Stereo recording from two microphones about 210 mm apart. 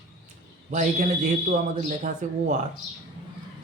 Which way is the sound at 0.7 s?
35° right (ahead or behind).